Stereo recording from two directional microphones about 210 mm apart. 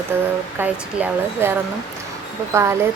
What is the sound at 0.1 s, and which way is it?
A woman's voice, 10° right (ahead or behind).